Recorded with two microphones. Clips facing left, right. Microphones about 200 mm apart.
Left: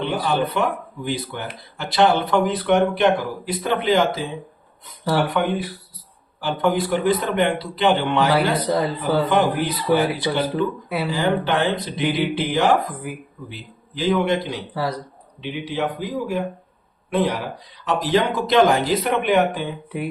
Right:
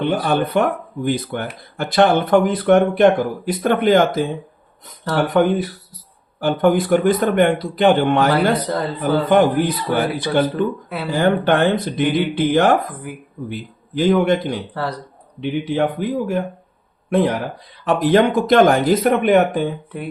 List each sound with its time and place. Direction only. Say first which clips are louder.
0.0 s speech: right 3 dB; 50° right (ahead or behind)
5.3 s speech: right 6 dB; 40° right (ahead or behind)
8.6 s speech: left 1 dB; 10° left (ahead or behind)
9.0 s speech: right 8 dB; 50° right (ahead or behind)
10.4 s speech: right 3 dB; 10° left (ahead or behind)
11.1 s speech: right 6 dB; 50° right (ahead or behind)
14.7 s speech: even; 10° left (ahead or behind)
15.4 s speech: right 6 dB; 50° right (ahead or behind)